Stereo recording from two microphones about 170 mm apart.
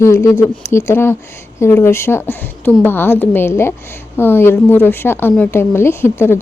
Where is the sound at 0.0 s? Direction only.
15° left (ahead or behind).